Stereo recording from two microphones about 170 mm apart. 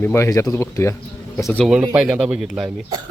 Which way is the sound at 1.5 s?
Centre (ahead or behind).